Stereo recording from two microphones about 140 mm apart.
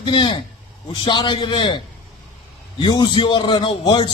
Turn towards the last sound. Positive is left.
turn(degrees=35)  # may be behind; listen again after turning